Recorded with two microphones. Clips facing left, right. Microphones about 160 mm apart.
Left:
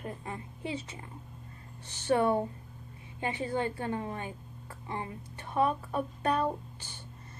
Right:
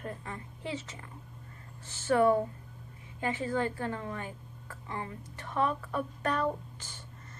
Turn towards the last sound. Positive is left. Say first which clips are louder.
# even
turn(degrees=15)  # may be behind; listen again after turning